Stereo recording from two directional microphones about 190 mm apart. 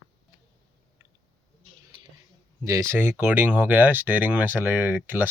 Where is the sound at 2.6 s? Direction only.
15° right (ahead or behind).